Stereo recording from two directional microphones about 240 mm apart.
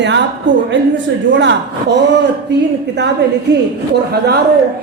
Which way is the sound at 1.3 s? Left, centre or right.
Right.